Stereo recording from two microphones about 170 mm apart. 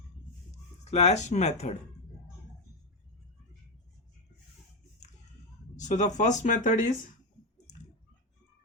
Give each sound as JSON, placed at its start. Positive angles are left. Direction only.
{"t": 0.9, "sound": "speech", "side_deg": 40}
{"t": 5.7, "sound": "speech", "side_deg": 45}